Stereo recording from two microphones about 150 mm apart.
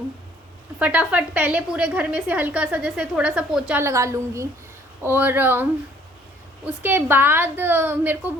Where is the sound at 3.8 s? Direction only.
20° right (ahead or behind).